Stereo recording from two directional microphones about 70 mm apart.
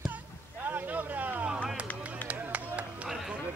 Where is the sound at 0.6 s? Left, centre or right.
Right.